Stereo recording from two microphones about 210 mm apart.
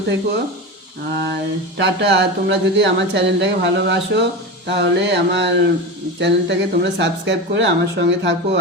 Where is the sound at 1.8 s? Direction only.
55° right (ahead or behind).